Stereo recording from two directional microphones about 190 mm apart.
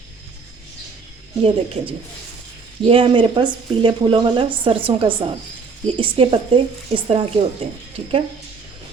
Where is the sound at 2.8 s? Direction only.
25° right (ahead or behind).